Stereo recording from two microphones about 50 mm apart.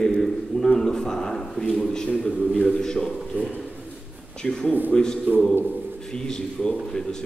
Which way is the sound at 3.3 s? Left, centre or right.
Right.